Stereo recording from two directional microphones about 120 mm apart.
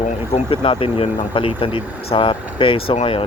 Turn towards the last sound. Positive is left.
turn(degrees=55)  # may be behind; listen again after turning